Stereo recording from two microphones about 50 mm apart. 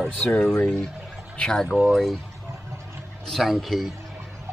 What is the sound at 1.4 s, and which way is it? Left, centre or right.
Speech, centre.